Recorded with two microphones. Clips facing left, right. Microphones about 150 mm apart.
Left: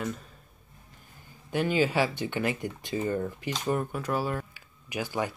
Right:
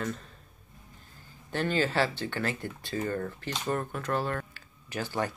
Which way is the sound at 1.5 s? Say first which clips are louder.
Left 3 dB; 10° left (ahead or behind).